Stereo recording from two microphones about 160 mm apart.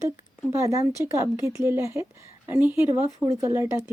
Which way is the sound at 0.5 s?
20° right (ahead or behind).